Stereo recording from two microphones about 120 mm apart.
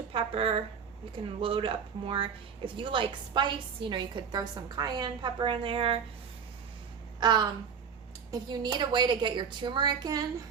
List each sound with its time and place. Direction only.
0.1 s a woman's voice: 50° right (ahead or behind)
7.2 s a woman's voice: 40° right (ahead or behind)